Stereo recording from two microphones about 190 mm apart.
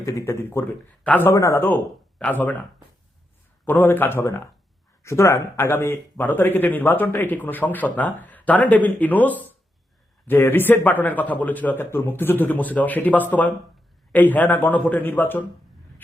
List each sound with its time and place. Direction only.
0.0 s a man's voice: 15° left (ahead or behind)
3.7 s a man's voice: 10° left (ahead or behind)